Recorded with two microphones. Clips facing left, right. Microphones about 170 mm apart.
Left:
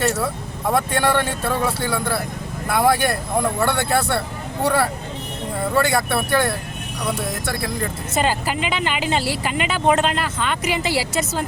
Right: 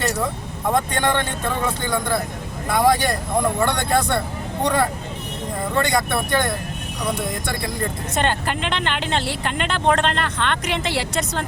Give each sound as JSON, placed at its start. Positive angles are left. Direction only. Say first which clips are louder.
{"t": 0.7, "sound": "speech", "louder": "left 1 dB", "side_deg": 10}
{"t": 8.1, "sound": "speech", "louder": "left 2 dB", "side_deg": 5}